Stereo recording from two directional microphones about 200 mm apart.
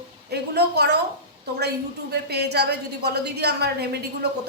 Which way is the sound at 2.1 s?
55° right (ahead or behind).